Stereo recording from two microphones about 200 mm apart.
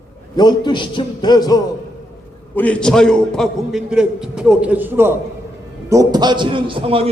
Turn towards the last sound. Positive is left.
turn(degrees=-30)  # may be behind; listen again after turning